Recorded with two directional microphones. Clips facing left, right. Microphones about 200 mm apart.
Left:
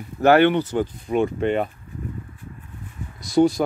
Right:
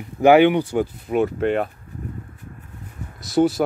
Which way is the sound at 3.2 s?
5° right (ahead or behind).